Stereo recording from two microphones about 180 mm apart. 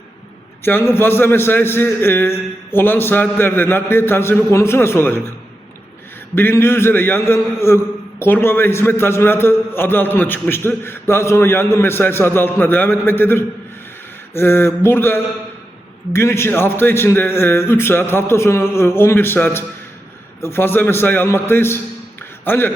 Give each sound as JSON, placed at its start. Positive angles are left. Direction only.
{"t": 0.6, "sound": "a man's voice", "side_deg": 10}
{"t": 6.3, "sound": "a man's voice", "side_deg": 15}